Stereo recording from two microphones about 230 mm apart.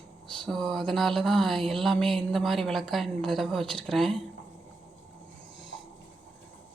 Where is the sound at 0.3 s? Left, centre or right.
Centre.